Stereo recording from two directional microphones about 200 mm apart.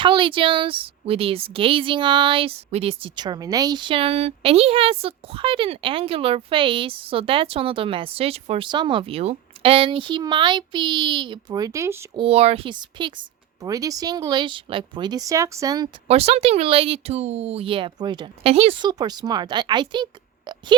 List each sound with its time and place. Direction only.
0.0 s a woman's voice: 25° right (ahead or behind)
12.2 s a woman's voice: 30° right (ahead or behind)
16.0 s a woman's voice: 30° right (ahead or behind)